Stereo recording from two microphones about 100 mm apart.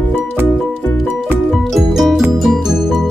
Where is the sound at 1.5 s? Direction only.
Centre (ahead or behind).